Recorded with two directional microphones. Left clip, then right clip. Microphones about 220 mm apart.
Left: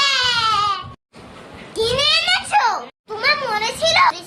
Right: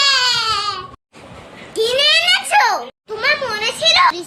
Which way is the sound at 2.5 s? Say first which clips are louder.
Right 2 dB; 10° right (ahead or behind).